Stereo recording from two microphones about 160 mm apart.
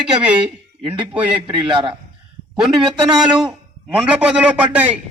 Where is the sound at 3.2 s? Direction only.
5° right (ahead or behind).